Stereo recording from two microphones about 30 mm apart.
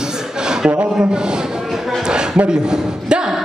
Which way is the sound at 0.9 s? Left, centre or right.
Right.